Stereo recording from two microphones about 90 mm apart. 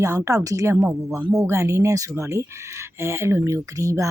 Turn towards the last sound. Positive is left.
turn(degrees=-35)  # may be behind; listen again after turning